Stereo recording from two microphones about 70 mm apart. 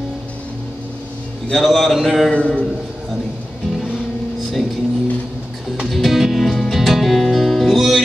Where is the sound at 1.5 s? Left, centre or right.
Centre.